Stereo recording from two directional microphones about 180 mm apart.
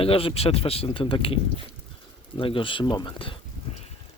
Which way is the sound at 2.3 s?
30° left (ahead or behind).